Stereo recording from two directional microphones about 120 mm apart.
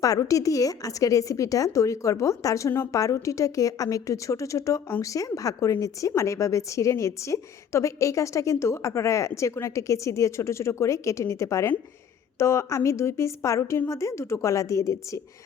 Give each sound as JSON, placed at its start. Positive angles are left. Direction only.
{"t": 0.0, "sound": "speech", "side_deg": 30}